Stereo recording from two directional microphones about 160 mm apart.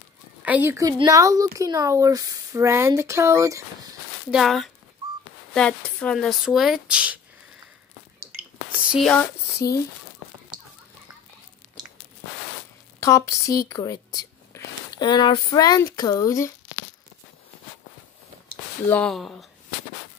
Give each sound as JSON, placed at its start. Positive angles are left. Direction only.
{"t": 0.4, "sound": "speech", "side_deg": -10}
{"t": 4.3, "sound": "speech", "side_deg": 0}
{"t": 9.0, "sound": "speech", "side_deg": 10}
{"t": 13.0, "sound": "speech", "side_deg": 20}
{"t": 18.9, "sound": "speech", "side_deg": 5}